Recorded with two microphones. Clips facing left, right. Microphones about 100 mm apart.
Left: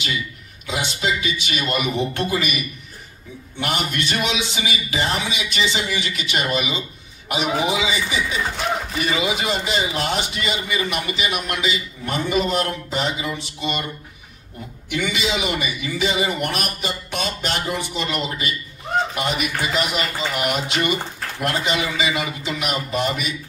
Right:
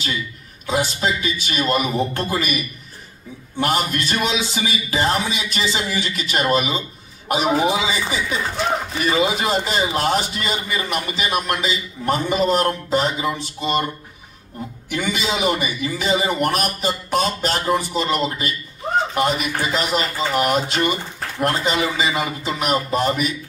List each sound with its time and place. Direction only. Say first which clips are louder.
0.7 s a man's voice: right 3 dB; 40° right (ahead or behind)
14.9 s a man's voice: even; 40° right (ahead or behind)